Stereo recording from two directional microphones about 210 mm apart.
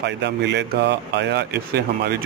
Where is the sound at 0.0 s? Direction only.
55° right (ahead or behind).